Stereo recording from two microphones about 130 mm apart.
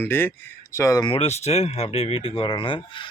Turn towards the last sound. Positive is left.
turn(degrees=40)  # may be behind; listen again after turning